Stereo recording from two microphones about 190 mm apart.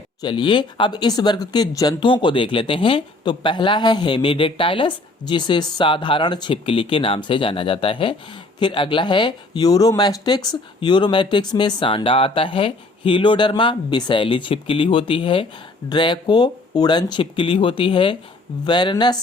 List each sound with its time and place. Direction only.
0.2 s speech: 25° left (ahead or behind)